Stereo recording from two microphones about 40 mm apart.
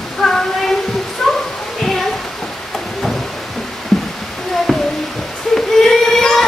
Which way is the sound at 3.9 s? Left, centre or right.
Centre.